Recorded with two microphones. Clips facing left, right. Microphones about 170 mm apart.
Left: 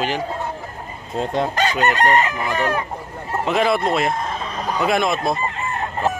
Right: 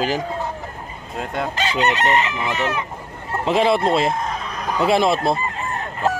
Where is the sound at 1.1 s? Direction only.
30° left (ahead or behind).